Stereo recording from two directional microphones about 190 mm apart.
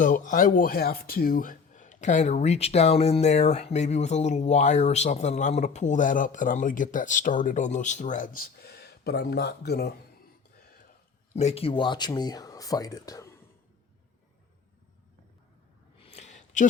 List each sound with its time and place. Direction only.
0.0 s speech: 45° left (ahead or behind)
11.3 s speech: 35° left (ahead or behind); by 13.3 s 15° left (ahead or behind)
16.0 s a sound: 35° left (ahead or behind)